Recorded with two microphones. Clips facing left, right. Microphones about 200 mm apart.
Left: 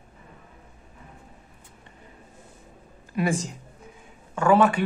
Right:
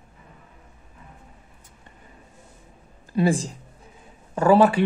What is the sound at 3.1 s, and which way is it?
A man's voice, 30° right (ahead or behind).